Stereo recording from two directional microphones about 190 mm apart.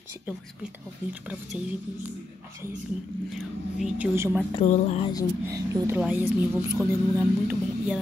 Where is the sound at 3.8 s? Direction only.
10° right (ahead or behind).